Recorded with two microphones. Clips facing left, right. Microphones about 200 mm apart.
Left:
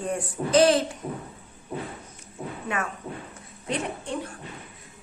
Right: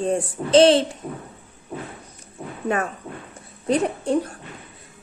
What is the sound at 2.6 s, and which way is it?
A woman's voice, 35° right (ahead or behind).